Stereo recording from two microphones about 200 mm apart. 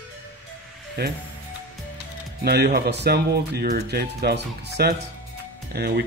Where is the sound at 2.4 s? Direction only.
55° right (ahead or behind).